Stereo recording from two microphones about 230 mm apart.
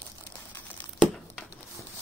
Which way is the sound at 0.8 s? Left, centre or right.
Centre.